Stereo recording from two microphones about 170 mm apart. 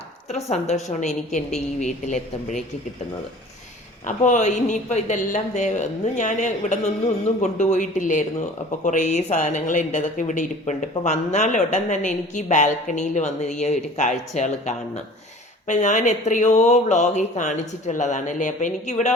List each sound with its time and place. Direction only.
0.3 s a woman's voice: 40° left (ahead or behind)
4.0 s speech: 45° left (ahead or behind)